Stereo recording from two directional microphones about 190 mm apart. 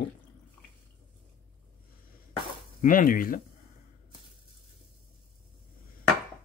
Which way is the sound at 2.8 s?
45° left (ahead or behind).